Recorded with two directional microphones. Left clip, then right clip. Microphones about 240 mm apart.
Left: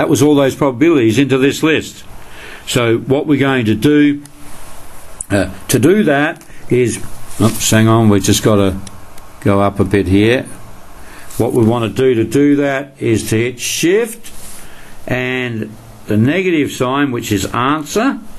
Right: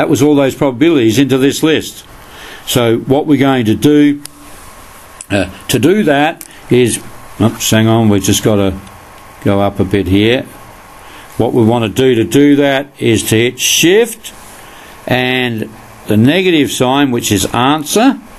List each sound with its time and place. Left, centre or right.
0.0 s speech: centre
5.3 s speech: centre; by 18.1 s right